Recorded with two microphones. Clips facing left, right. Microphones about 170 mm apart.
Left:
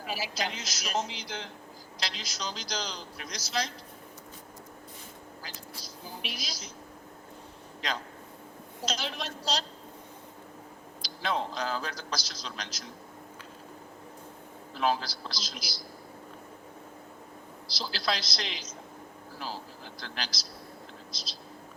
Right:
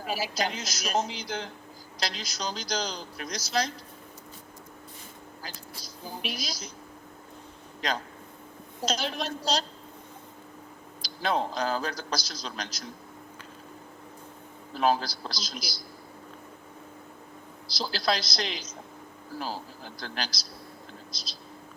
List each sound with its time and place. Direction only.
0.0 s a man's voice: 40° right (ahead or behind)
6.2 s a man's voice: 40° right (ahead or behind)
7.8 s a man's voice: 40° right (ahead or behind)
11.0 s a man's voice: 40° right (ahead or behind)
14.7 s a man's voice: 45° right (ahead or behind)
17.7 s a man's voice: 40° right (ahead or behind)